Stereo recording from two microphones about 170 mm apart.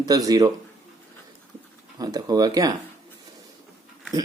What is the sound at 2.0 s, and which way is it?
Speech, 20° right (ahead or behind).